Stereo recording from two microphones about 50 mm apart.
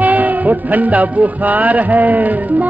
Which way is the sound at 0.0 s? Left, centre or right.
Right.